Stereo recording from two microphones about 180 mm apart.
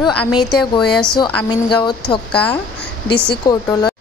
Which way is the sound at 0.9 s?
5° left (ahead or behind).